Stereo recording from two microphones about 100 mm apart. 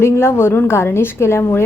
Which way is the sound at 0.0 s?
25° left (ahead or behind).